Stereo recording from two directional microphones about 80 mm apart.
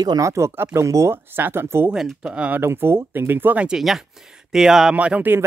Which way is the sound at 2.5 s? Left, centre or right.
Right.